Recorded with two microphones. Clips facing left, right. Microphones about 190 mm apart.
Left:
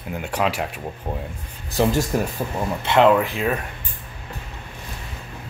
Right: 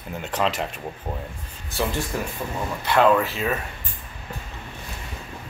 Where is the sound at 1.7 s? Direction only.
40° left (ahead or behind).